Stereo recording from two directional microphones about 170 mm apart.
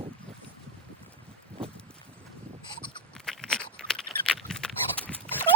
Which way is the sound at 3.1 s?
5° left (ahead or behind).